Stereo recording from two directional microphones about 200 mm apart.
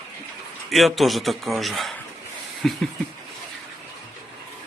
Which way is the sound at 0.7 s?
Centre (ahead or behind).